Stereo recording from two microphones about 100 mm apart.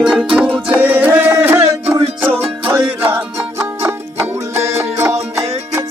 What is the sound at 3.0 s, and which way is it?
Music, 20° right (ahead or behind).